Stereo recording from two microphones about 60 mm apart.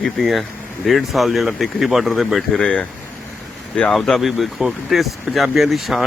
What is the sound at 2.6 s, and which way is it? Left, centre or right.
Speech, centre.